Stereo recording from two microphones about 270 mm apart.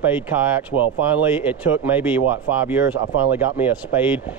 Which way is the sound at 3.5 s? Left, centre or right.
Centre.